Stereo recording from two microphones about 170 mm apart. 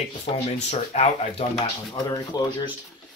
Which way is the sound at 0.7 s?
35° left (ahead or behind).